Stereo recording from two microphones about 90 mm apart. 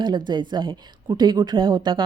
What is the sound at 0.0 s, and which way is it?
A woman's voice, 55° right (ahead or behind).